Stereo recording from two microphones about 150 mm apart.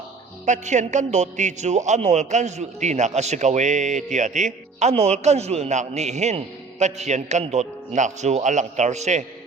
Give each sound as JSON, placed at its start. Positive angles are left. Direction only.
{"t": 0.4, "sound": "a man's voice", "side_deg": -55}